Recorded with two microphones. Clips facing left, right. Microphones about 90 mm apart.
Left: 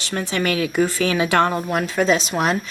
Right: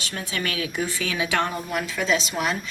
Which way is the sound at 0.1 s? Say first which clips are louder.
Left 9 dB; 60° left (ahead or behind).